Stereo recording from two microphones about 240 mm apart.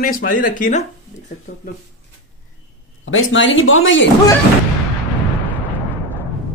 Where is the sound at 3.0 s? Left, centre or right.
Left.